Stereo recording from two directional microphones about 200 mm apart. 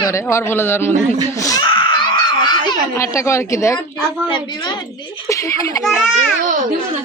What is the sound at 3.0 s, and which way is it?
A woman's voice, 15° left (ahead or behind).